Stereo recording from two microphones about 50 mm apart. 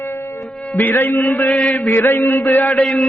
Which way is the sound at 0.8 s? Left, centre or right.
Left.